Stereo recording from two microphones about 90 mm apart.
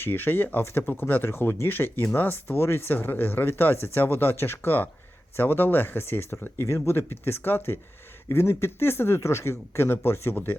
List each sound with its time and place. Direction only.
0.0 s speech: 25° left (ahead or behind)